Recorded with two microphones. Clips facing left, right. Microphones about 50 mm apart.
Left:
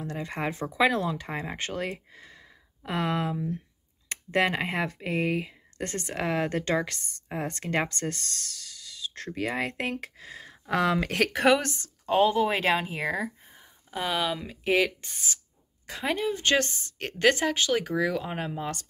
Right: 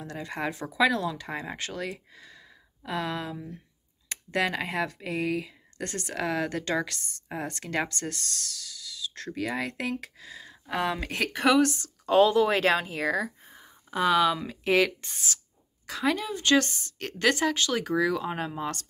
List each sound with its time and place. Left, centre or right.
0.0 s a woman's voice: left
10.7 s speech: left
11.4 s a woman's voice: left
13.9 s speech: centre
15.9 s a woman's voice: left